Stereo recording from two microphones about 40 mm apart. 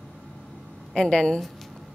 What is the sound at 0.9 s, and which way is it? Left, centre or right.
Speech, centre.